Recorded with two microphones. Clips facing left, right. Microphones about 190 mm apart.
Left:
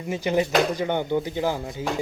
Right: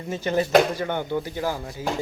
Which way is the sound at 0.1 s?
10° left (ahead or behind).